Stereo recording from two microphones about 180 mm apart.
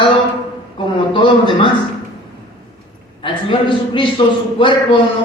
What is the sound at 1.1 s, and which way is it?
Speech, 25° left (ahead or behind).